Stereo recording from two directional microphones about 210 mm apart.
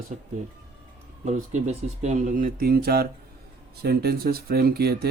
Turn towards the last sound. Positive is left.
turn(degrees=-50)  # may be behind; listen again after turning